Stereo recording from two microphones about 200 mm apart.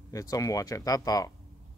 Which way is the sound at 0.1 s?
15° left (ahead or behind).